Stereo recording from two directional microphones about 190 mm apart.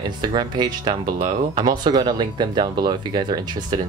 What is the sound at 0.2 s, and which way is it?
Speech, 20° right (ahead or behind).